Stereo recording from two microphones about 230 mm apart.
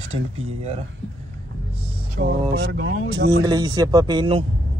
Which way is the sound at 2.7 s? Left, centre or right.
Right.